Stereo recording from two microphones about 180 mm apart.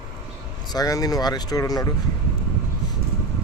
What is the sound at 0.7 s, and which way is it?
Speech, 20° left (ahead or behind).